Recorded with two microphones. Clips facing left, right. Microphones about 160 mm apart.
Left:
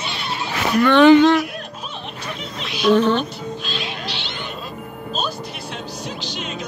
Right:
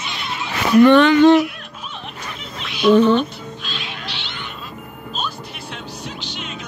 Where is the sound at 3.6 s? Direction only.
35° left (ahead or behind).